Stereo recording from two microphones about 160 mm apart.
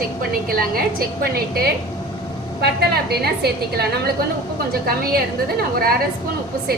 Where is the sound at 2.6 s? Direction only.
85° right.